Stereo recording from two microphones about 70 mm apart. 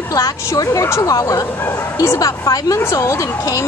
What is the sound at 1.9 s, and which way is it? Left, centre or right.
Speech, left.